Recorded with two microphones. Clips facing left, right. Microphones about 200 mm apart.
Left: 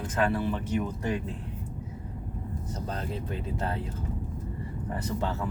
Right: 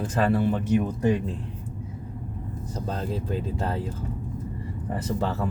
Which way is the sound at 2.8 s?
30° right (ahead or behind).